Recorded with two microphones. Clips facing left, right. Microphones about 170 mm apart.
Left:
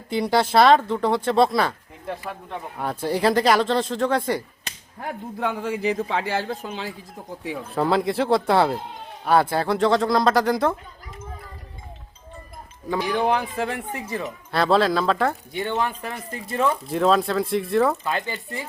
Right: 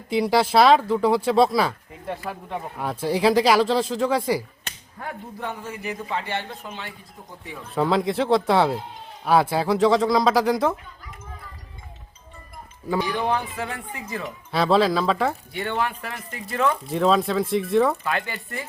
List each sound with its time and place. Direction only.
0.1 s speech: centre (ahead or behind)
5.4 s a man's voice: 90° left
7.8 s speech: centre (ahead or behind)
13.5 s a man's voice: 30° left (ahead or behind)
14.5 s speech: centre (ahead or behind)
15.5 s a man's voice: 20° left (ahead or behind)
16.6 s speech: 5° left (ahead or behind)
18.0 s a man's voice: 20° left (ahead or behind)